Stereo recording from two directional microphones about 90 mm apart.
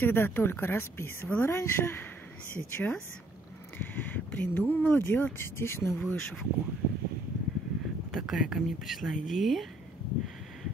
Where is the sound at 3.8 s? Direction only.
20° left (ahead or behind).